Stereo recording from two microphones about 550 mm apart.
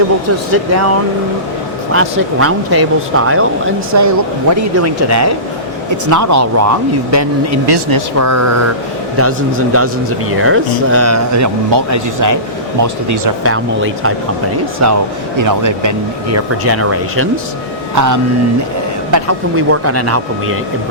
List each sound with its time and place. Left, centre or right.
0.5 s speech: right
1.9 s speech: right
9.7 s speech: right